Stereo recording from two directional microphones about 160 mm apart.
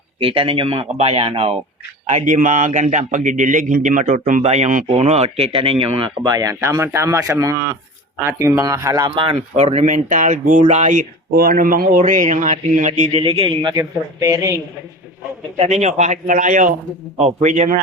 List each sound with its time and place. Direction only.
0.2 s speech: 35° right (ahead or behind)
2.0 s speech: 50° right (ahead or behind); by 9.2 s 20° right (ahead or behind)
9.2 s speech: 35° right (ahead or behind)
12.9 s speech: 35° right (ahead or behind)
13.7 s speech: 20° right (ahead or behind)
15.5 s speech: 45° right (ahead or behind)